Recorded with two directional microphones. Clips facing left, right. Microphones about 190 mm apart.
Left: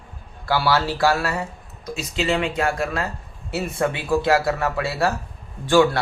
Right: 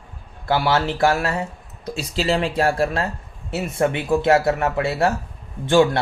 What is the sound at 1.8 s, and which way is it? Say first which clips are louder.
Speech: right 1 dB; 35° right (ahead or behind).